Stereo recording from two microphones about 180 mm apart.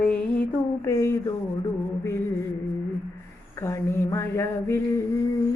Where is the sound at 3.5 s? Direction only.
15° left (ahead or behind).